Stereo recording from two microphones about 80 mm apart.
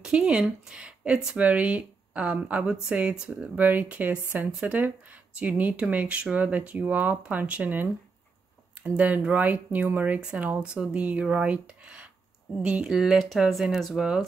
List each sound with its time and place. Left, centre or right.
0.0 s speech: centre
3.5 s speech: right
4.5 s speech: centre
4.7 s speech: right